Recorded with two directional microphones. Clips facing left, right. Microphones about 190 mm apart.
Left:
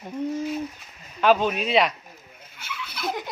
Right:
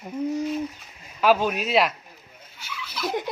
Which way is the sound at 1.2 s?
5° right (ahead or behind).